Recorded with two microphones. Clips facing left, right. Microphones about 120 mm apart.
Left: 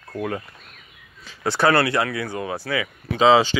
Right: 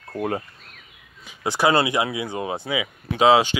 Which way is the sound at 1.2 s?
15° right (ahead or behind).